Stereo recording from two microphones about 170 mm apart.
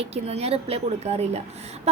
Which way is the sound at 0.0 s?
35° right (ahead or behind).